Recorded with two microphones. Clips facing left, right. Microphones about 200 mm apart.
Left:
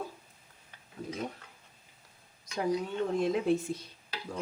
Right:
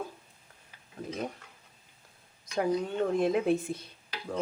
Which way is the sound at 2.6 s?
55° right (ahead or behind).